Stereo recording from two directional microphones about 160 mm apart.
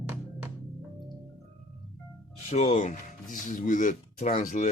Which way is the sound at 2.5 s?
45° left (ahead or behind).